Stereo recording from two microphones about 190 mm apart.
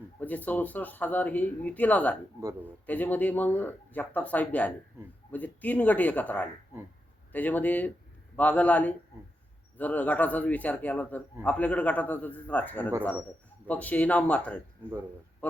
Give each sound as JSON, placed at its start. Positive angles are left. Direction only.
{"t": 0.2, "sound": "speech", "side_deg": 10}
{"t": 2.4, "sound": "speech", "side_deg": -20}
{"t": 2.8, "sound": "speech", "side_deg": 10}